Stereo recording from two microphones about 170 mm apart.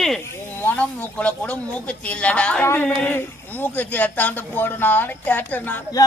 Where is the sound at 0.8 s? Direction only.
10° left (ahead or behind).